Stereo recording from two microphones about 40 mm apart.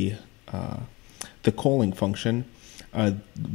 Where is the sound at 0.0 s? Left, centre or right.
Centre.